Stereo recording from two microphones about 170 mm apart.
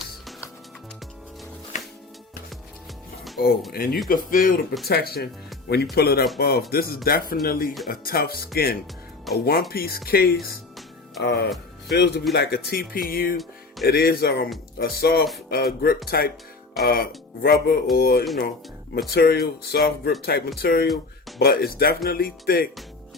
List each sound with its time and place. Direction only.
3.3 s speech: 65° left (ahead or behind)
13.3 s music: centre (ahead or behind)
13.8 s speech: 65° left (ahead or behind)
20.8 s speech: centre (ahead or behind)
21.3 s speech: 65° left (ahead or behind)